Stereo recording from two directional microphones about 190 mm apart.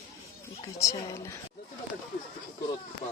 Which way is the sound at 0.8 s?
15° left (ahead or behind).